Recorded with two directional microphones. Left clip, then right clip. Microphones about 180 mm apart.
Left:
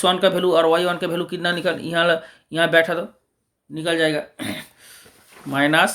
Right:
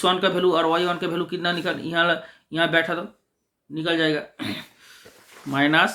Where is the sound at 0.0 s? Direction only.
35° left (ahead or behind).